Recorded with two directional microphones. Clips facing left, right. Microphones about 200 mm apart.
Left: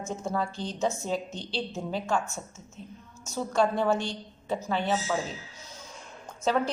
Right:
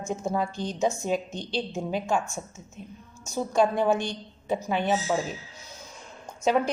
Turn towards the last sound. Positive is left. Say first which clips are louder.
# right 3 dB
turn(degrees=-15)  # may be behind; listen again after turning